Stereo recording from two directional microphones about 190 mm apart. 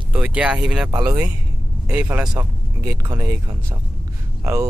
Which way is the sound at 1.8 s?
10° right (ahead or behind).